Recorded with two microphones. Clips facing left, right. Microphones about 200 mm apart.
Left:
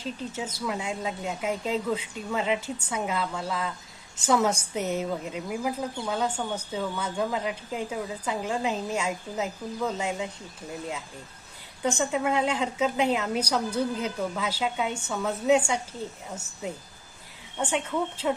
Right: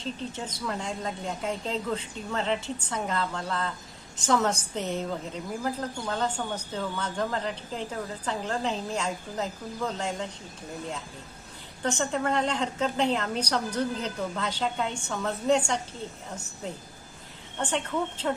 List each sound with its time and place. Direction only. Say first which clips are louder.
0.0 s a woman's voice: left 1 dB; 5° left (ahead or behind)
11.8 s a woman's voice: left 2 dB; 10° left (ahead or behind)
17.6 s a woman's voice: left 1 dB; 10° left (ahead or behind)